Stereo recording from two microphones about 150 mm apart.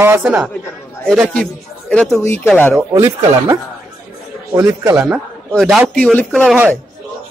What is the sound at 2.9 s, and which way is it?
A man's voice, 20° right (ahead or behind).